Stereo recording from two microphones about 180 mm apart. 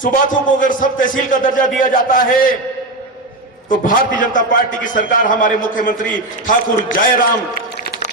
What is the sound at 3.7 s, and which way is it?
A man's voice, 50° left (ahead or behind).